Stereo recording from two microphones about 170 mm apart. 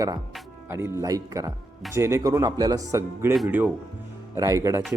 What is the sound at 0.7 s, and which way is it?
Speech, 15° right (ahead or behind).